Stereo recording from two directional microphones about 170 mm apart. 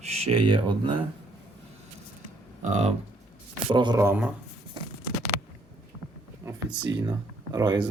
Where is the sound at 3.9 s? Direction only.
10° right (ahead or behind).